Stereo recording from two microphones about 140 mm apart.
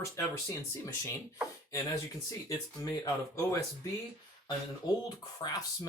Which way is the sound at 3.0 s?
20° left (ahead or behind).